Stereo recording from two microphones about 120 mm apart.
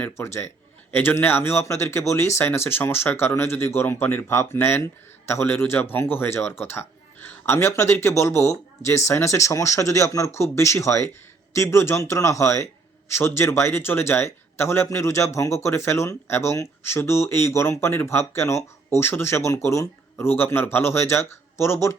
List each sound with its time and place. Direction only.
0.0 s speech: 20° left (ahead or behind)